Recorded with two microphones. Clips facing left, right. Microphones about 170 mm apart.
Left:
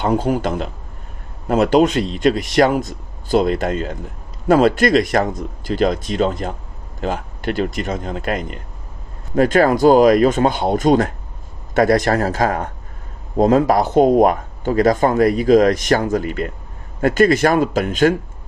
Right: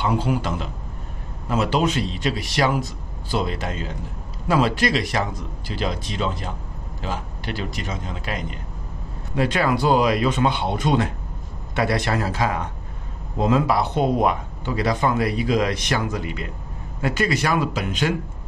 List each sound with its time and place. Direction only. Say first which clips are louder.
0.0 s speech: left 5 dB; 45° left (ahead or behind)